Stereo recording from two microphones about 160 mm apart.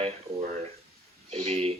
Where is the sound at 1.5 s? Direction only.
35° right (ahead or behind).